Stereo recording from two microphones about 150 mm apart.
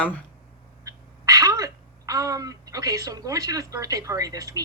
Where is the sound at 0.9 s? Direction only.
25° right (ahead or behind).